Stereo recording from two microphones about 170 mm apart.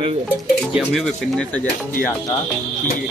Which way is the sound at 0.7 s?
Centre (ahead or behind).